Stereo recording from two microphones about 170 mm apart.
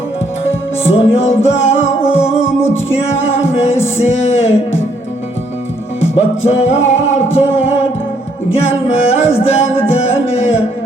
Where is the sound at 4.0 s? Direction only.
40° left (ahead or behind).